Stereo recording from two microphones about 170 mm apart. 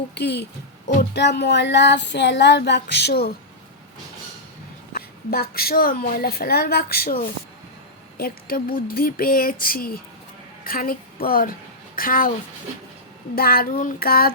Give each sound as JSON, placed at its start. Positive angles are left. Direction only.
{"t": 0.1, "sound": "speech", "side_deg": 80}
{"t": 1.1, "sound": "child singing", "side_deg": 85}
{"t": 4.9, "sound": "a woman's voice", "side_deg": 65}
{"t": 13.3, "sound": "a woman's voice", "side_deg": 60}